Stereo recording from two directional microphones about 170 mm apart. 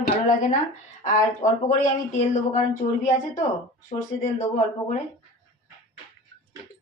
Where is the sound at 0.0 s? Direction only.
45° left (ahead or behind).